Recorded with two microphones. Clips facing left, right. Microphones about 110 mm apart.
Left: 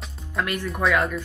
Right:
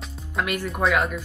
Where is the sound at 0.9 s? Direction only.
15° right (ahead or behind).